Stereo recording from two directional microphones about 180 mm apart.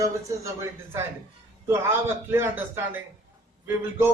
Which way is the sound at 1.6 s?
15° right (ahead or behind).